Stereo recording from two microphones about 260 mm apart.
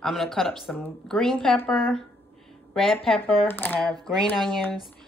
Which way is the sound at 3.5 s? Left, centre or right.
Centre.